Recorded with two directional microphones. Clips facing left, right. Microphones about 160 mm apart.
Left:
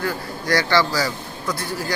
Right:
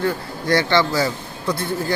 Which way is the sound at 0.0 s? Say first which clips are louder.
Right 3 dB; 25° right (ahead or behind).